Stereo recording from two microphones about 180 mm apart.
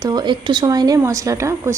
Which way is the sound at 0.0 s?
20° right (ahead or behind).